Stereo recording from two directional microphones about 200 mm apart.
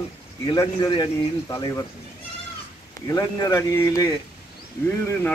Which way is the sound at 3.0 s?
15° left (ahead or behind).